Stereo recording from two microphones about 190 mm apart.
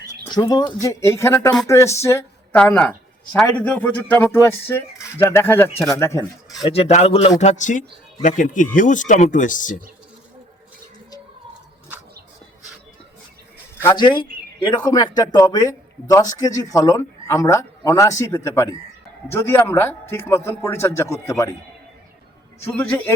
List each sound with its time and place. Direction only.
0.1 s speech: 20° left (ahead or behind)
6.7 s speech: 35° left (ahead or behind)
13.8 s speech: 25° left (ahead or behind)
22.8 s speech: 10° left (ahead or behind)